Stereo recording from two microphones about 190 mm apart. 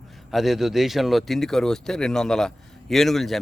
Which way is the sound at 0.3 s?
Centre (ahead or behind).